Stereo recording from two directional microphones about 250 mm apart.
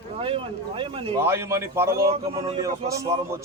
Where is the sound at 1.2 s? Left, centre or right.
Centre.